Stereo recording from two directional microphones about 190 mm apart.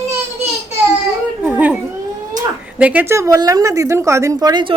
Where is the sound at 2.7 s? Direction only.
5° right (ahead or behind).